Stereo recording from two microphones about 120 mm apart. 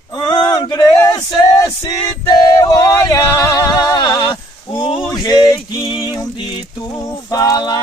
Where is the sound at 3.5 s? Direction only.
30° left (ahead or behind).